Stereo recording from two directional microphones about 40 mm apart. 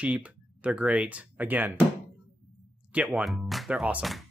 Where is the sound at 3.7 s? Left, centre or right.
Right.